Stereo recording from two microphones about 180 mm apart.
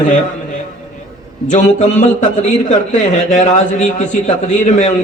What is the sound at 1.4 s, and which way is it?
A man's voice, 45° left (ahead or behind).